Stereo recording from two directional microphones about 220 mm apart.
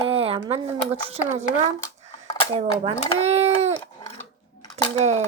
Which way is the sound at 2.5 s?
25° right (ahead or behind).